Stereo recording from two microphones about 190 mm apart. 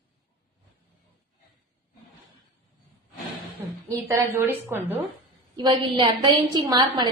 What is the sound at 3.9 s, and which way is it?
A woman's voice, 15° right (ahead or behind).